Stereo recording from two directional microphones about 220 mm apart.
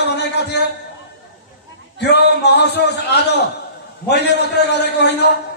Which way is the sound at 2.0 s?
50° left (ahead or behind).